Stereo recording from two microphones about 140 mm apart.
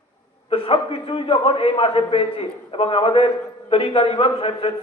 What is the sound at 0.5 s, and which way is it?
A man's voice, 40° left (ahead or behind).